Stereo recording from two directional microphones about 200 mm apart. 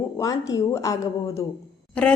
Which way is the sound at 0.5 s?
15° left (ahead or behind).